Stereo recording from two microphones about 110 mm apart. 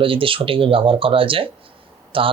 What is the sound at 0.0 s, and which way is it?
Speech, 55° right (ahead or behind).